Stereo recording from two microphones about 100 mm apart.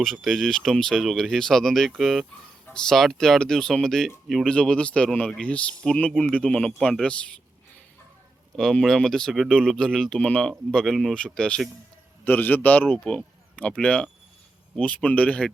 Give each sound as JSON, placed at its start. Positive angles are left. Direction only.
{"t": 0.0, "sound": "speech", "side_deg": 0}
{"t": 8.5, "sound": "speech", "side_deg": 5}